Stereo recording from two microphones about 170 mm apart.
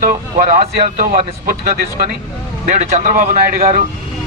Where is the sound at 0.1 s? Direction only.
50° right (ahead or behind).